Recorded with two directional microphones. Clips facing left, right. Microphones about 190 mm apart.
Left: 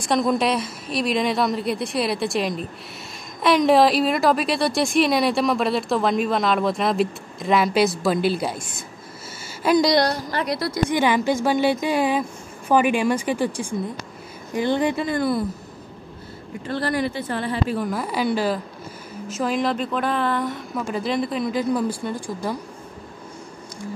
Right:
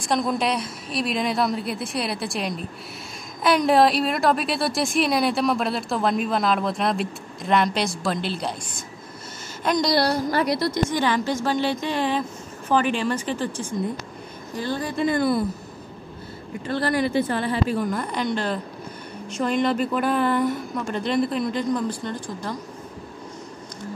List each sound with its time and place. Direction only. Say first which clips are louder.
0.0 s speech: left 3 dB; centre (ahead or behind)
9.6 s speech: left 4 dB; 5° left (ahead or behind)
9.9 s speech: even; 5° right (ahead or behind)
10.9 s a woman's voice: left 3 dB; 10° left (ahead or behind)
17.6 s speech: even; 5° left (ahead or behind)